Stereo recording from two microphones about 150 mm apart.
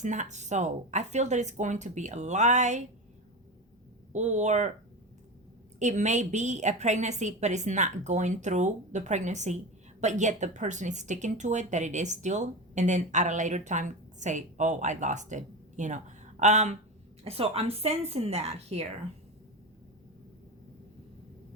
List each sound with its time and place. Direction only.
0.0 s speech: 55° right (ahead or behind)
4.1 s speech: 50° right (ahead or behind)
5.8 s speech: 50° right (ahead or behind)